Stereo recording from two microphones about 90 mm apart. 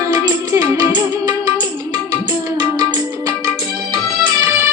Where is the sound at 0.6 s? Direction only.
50° right (ahead or behind).